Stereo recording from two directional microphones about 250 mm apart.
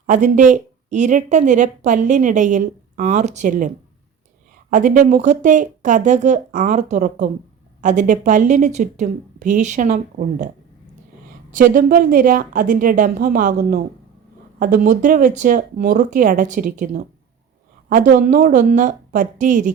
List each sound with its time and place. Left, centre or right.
0.1 s a woman's voice: right
4.7 s a woman's voice: right
11.5 s a woman's voice: right